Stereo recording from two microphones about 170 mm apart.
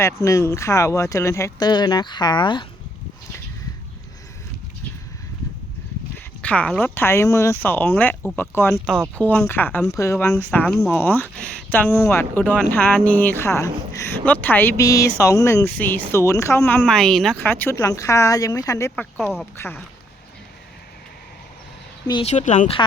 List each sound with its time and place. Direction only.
0.0 s speech: 15° left (ahead or behind)
6.4 s a woman's voice: 5° left (ahead or behind)
22.2 s speech: 40° left (ahead or behind)